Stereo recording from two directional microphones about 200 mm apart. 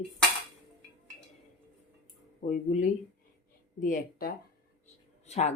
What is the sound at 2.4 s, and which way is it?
Speech, 40° left (ahead or behind).